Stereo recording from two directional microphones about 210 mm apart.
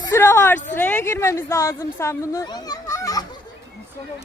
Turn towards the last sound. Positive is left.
turn(degrees=15)  # may be behind; listen again after turning